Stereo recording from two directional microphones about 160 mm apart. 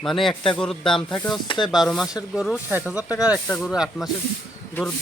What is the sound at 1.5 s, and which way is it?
Speech, 30° left (ahead or behind).